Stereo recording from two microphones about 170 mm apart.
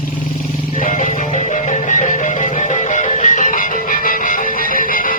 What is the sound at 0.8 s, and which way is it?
Music, 50° left (ahead or behind).